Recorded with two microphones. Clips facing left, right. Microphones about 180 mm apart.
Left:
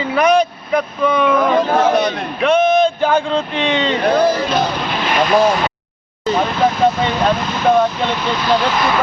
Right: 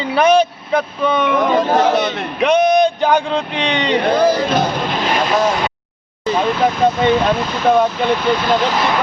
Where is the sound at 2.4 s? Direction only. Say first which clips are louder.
Even; 15° right (ahead or behind).